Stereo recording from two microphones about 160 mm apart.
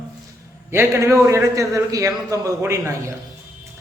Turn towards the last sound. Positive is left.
turn(degrees=-20)  # may be behind; listen again after turning